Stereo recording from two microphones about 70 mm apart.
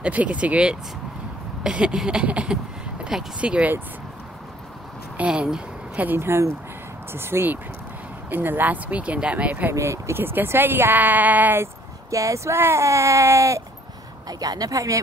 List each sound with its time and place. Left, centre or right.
0.0 s speech: centre
5.1 s a sound: centre
6.0 s speech: right
9.8 s speech: right
11.6 s speech: right
12.5 s speech: right
14.2 s speech: right